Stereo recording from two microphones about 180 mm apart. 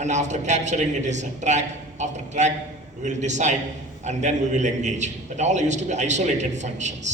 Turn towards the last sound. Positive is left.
turn(degrees=-40)  # may be behind; listen again after turning